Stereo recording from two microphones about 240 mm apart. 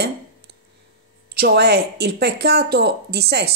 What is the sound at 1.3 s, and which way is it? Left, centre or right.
Speech, right.